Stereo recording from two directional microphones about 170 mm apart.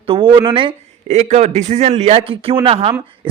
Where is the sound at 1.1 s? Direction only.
45° right (ahead or behind).